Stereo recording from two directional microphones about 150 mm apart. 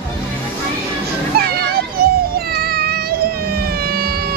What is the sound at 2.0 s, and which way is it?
Children playing, 90° right.